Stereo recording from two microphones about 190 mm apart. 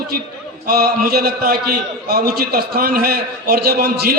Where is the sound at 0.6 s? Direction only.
55° right (ahead or behind).